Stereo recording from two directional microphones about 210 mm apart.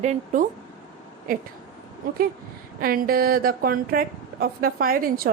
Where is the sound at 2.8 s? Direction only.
45° right (ahead or behind).